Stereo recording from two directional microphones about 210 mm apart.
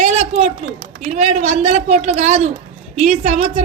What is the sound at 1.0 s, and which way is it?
A man's voice, 35° right (ahead or behind).